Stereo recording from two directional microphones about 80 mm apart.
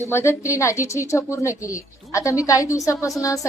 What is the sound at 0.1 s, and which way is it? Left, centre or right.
A woman's voice, left.